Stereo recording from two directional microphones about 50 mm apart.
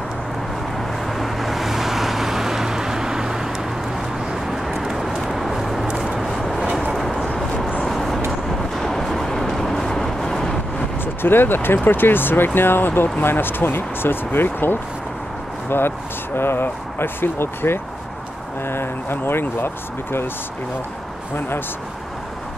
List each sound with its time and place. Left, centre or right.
0.7 s vehicle: centre
5.9 s vehicle: centre
6.1 s a sound: centre
7.8 s vehicle: centre
11.2 s speech: left